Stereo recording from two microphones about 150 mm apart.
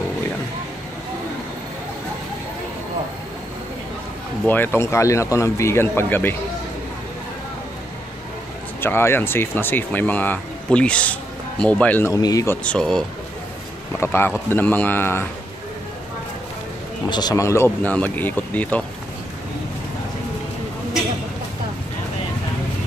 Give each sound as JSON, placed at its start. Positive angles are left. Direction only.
{"t": 4.5, "sound": "speech", "side_deg": 15}
{"t": 8.8, "sound": "speech", "side_deg": 15}
{"t": 12.1, "sound": "speech", "side_deg": 25}
{"t": 12.6, "sound": "speech", "side_deg": 5}
{"t": 13.9, "sound": "speech", "side_deg": 15}
{"t": 17.1, "sound": "speech", "side_deg": 25}